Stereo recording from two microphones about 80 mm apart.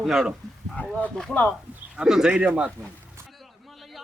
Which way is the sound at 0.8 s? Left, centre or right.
Left.